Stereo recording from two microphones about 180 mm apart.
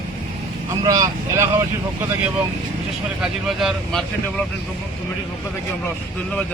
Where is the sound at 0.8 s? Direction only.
20° right (ahead or behind).